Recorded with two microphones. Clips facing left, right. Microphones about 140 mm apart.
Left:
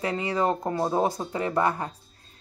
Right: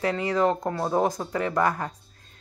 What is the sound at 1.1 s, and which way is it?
Speech, 30° left (ahead or behind).